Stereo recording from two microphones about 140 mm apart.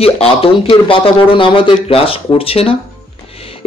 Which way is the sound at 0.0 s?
45° left (ahead or behind).